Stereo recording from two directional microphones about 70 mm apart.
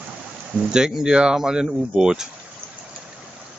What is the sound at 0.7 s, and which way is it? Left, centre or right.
Speech, centre.